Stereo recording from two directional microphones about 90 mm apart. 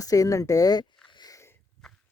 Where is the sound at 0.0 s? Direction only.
40° left (ahead or behind).